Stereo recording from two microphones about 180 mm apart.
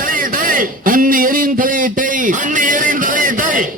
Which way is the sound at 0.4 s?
50° right (ahead or behind).